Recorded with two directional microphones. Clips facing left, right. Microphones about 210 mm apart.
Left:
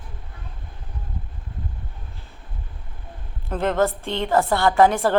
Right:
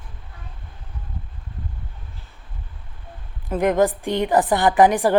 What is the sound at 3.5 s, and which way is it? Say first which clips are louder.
A woman's voice: right 3 dB; 15° right (ahead or behind).